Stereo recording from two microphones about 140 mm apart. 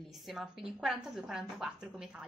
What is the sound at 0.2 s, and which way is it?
A woman's voice, centre (ahead or behind).